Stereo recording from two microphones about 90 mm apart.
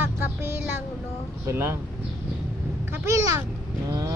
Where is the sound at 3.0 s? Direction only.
35° right (ahead or behind).